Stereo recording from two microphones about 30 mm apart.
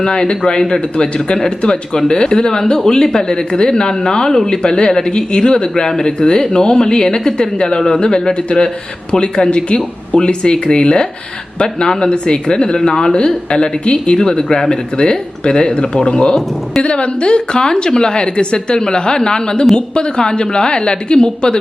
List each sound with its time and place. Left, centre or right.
0.0 s a woman's voice: left